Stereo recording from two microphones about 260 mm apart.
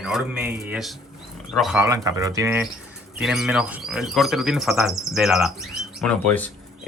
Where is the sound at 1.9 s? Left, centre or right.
Centre.